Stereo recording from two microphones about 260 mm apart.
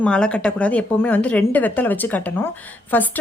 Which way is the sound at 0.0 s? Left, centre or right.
Centre.